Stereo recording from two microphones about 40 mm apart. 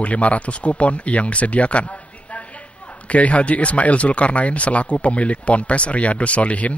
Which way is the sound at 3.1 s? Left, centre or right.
Left.